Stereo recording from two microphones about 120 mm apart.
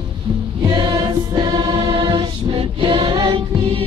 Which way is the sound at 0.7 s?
40° right (ahead or behind).